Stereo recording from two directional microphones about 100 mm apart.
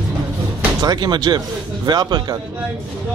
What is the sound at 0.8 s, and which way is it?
Speech, 45° right (ahead or behind).